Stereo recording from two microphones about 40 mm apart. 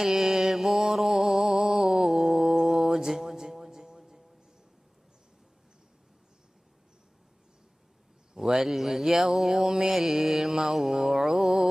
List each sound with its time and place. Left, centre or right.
0.0 s mantra: centre
3.8 s music: centre
8.4 s speech: centre
9.6 s mantra: centre